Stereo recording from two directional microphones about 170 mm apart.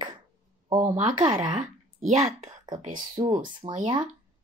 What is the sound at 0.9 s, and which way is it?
A woman's voice, 45° right (ahead or behind).